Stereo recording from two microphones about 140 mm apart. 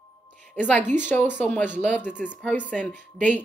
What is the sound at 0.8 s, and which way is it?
Speech, 60° right (ahead or behind).